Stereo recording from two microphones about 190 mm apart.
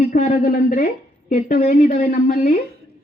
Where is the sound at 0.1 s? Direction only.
40° left (ahead or behind).